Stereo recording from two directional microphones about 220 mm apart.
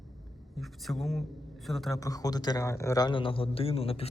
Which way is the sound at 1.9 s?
15° left (ahead or behind).